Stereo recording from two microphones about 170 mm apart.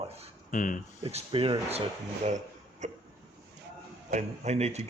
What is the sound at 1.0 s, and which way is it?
Speech, 35° right (ahead or behind).